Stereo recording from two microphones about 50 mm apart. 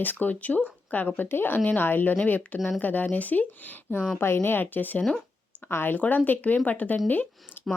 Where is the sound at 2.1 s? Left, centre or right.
Left.